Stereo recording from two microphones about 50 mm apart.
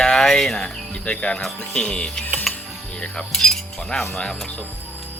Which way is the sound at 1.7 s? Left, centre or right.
Centre.